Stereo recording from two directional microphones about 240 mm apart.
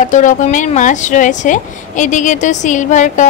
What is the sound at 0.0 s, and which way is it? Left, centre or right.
Speech, left.